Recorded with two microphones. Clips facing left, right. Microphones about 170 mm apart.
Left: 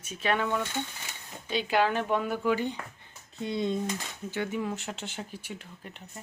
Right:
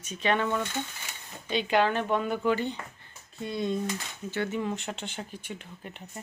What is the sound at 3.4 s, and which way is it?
Speech, 20° left (ahead or behind).